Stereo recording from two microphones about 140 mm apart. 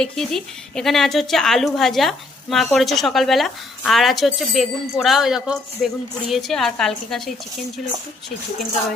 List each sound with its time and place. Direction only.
0.0 s speech: 5° left (ahead or behind)